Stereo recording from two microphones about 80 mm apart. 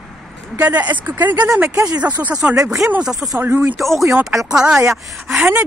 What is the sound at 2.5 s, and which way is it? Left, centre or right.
Speech, right.